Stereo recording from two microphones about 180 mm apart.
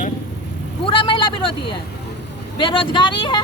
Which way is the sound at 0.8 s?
30° left (ahead or behind).